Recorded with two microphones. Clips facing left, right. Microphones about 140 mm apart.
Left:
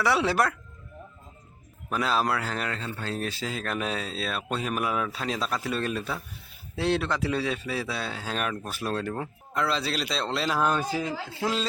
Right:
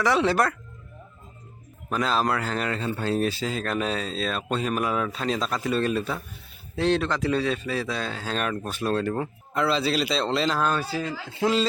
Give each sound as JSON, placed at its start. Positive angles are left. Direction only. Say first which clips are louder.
{"t": 0.0, "sound": "a man's voice", "louder": "right 2 dB", "side_deg": 5}
{"t": 1.9, "sound": "a man's voice", "louder": "right 2 dB", "side_deg": 5}
{"t": 2.9, "sound": "speech", "louder": "right 7 dB", "side_deg": -15}
{"t": 3.2, "sound": "a man's voice", "louder": "right 5 dB", "side_deg": 0}
{"t": 6.7, "sound": "a man's voice", "louder": "right 3 dB", "side_deg": 10}
{"t": 10.6, "sound": "speech", "louder": "even", "side_deg": 15}
{"t": 11.3, "sound": "a man's voice", "louder": "right 9 dB", "side_deg": 0}